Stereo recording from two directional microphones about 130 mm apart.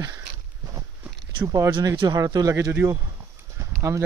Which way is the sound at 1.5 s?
30° right (ahead or behind).